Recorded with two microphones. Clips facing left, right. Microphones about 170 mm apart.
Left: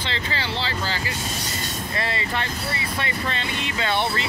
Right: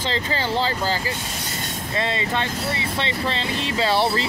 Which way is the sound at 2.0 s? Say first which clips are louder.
Right 4 dB; 20° right (ahead or behind).